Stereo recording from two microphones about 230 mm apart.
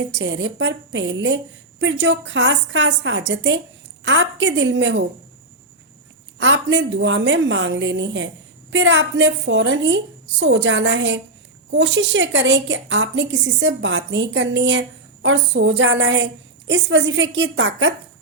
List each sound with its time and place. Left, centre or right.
0.0 s a woman's voice: right
6.4 s a woman's voice: right